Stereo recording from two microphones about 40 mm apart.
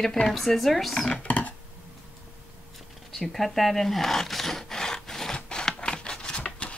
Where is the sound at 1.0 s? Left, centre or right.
Left.